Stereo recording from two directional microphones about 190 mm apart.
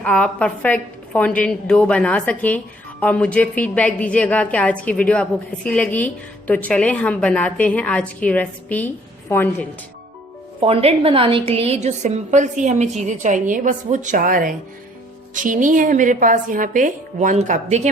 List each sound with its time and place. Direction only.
0.0 s a woman's voice: 5° left (ahead or behind)
10.6 s a woman's voice: 30° right (ahead or behind)